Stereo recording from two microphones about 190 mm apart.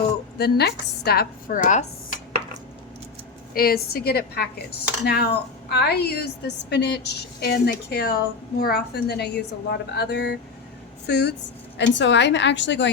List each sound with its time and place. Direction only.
0.3 s a woman's voice: 55° left (ahead or behind)
3.5 s a woman's voice: 50° left (ahead or behind); by 12.9 s 70° left (ahead or behind)